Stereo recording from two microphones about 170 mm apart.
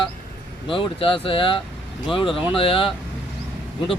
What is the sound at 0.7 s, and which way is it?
Speech, 30° left (ahead or behind).